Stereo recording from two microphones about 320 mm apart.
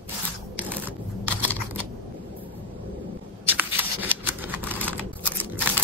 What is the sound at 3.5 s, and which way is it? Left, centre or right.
Shuffling cards, centre.